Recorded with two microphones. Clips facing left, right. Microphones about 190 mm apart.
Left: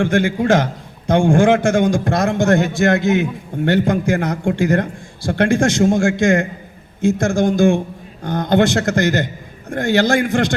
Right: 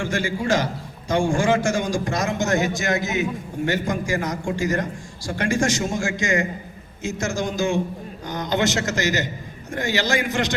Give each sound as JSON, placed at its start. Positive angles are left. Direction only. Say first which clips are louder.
{"t": 0.0, "sound": "a man's voice", "louder": "left 8 dB", "side_deg": 60}